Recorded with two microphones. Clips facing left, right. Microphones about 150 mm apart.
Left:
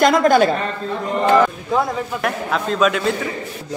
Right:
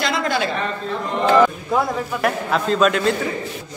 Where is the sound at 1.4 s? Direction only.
Centre (ahead or behind).